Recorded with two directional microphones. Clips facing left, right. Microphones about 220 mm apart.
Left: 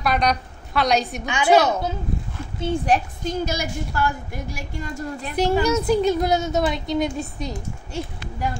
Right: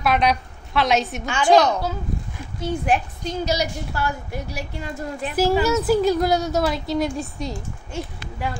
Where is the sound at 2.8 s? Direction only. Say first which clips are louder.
Left 1 dB; 45° left (ahead or behind).